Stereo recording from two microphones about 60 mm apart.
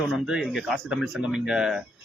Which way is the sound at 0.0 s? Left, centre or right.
Centre.